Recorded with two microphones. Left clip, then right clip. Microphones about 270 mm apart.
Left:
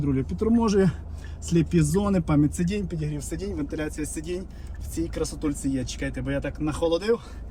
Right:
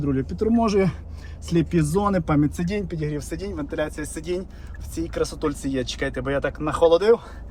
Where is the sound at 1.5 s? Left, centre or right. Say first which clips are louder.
Right 2 dB; centre.